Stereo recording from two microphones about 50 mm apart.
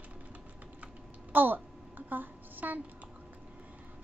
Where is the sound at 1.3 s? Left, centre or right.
Right.